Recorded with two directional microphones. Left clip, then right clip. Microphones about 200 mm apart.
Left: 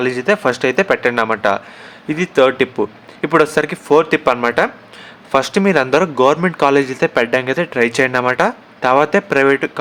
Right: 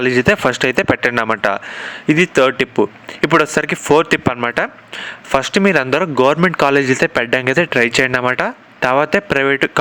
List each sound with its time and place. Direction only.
0.0 s speech: 30° right (ahead or behind)